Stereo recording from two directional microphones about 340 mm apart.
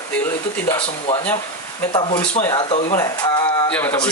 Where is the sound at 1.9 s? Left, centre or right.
Centre.